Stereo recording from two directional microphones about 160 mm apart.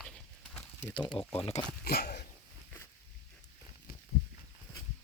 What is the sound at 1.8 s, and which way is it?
Dog, 90° left.